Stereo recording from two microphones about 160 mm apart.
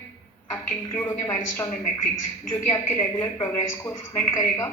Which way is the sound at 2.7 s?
20° left (ahead or behind).